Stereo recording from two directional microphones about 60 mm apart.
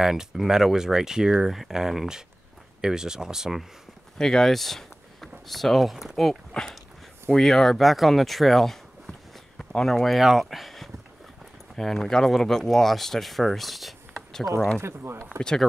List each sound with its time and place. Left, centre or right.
0.0 s speech: centre
4.2 s speech: centre
14.1 s a sound: centre
14.8 s speech: right
15.2 s speech: centre